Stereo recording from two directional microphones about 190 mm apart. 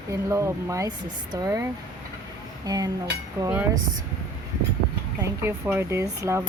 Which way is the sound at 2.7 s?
20° right (ahead or behind).